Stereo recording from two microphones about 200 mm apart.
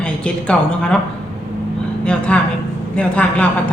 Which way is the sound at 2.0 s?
5° left (ahead or behind).